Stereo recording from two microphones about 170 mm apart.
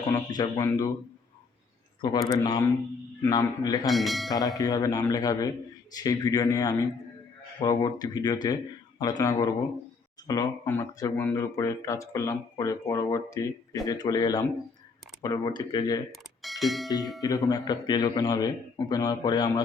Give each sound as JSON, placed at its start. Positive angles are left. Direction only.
{"t": 0.1, "sound": "speech", "side_deg": 20}
{"t": 2.0, "sound": "speech", "side_deg": 25}
{"t": 3.8, "sound": "speech", "side_deg": 0}
{"t": 4.3, "sound": "speech", "side_deg": 20}
{"t": 16.1, "sound": "bell", "side_deg": 0}
{"t": 17.2, "sound": "speech", "side_deg": 20}